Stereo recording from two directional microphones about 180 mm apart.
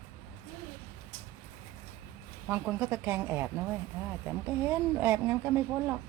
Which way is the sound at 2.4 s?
10° right (ahead or behind).